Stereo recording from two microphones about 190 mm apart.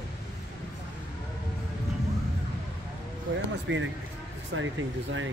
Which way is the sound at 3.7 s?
70° right (ahead or behind).